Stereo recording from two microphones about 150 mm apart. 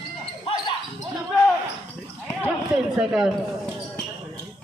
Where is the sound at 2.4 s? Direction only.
5° right (ahead or behind).